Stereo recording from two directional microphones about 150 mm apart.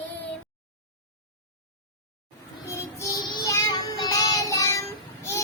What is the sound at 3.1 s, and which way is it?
Child singing, 25° left (ahead or behind).